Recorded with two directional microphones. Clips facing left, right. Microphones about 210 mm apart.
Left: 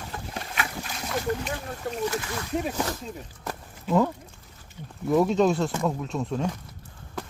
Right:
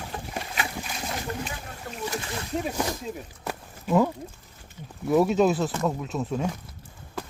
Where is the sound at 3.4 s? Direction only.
10° right (ahead or behind).